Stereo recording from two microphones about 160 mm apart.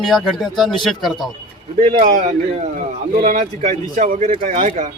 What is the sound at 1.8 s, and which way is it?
Speech, 40° right (ahead or behind).